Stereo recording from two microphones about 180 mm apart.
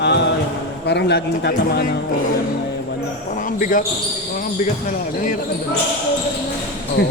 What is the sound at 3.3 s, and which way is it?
Basketball bounce, 45° left (ahead or behind).